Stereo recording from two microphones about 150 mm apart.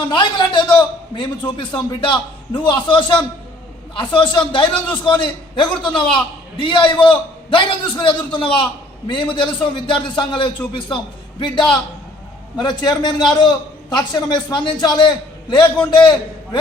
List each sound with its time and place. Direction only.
0.1 s a man's voice: 30° left (ahead or behind)